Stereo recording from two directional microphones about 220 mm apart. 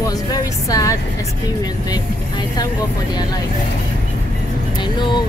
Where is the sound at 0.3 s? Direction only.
15° left (ahead or behind).